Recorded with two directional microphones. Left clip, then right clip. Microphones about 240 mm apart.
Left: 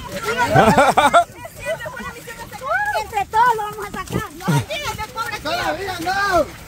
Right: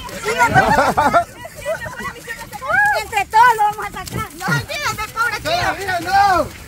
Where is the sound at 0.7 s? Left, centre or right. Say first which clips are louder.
Left 1 dB; left.